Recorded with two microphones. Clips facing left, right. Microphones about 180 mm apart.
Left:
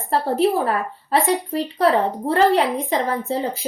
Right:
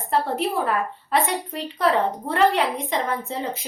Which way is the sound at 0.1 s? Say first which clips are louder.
Left 5 dB; 35° left (ahead or behind).